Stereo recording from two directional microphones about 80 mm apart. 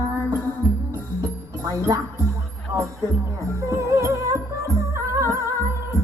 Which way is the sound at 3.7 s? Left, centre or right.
Right.